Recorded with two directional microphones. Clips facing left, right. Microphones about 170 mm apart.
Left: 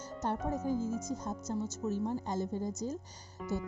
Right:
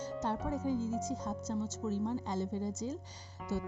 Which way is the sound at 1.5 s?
15° left (ahead or behind).